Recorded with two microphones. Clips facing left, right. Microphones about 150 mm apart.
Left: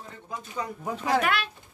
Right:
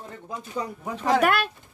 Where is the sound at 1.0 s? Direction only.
50° right (ahead or behind).